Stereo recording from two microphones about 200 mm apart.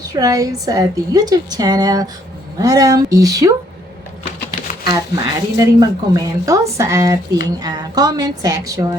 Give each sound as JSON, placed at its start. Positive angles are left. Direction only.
{"t": 0.0, "sound": "a woman's voice", "side_deg": -20}
{"t": 4.9, "sound": "a woman's voice", "side_deg": -20}